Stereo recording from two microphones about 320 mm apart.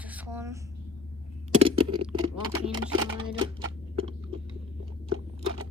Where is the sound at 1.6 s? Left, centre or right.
Centre.